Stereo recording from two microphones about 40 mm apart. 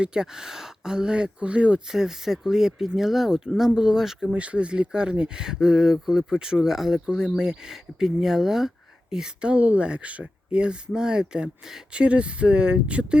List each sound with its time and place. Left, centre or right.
0.0 s speech: centre
1.9 s speech: centre
4.4 s speech: right; by 8.7 s centre
9.0 s speech: right
10.6 s speech: right